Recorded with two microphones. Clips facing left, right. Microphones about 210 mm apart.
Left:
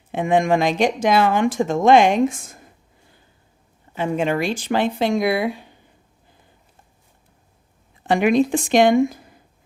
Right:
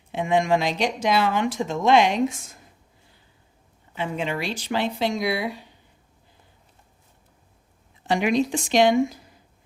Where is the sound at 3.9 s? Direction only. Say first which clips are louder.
Left 6 dB; 45° left (ahead or behind).